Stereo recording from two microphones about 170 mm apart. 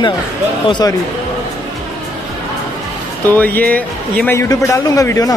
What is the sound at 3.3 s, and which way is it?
A man's voice, 10° left (ahead or behind).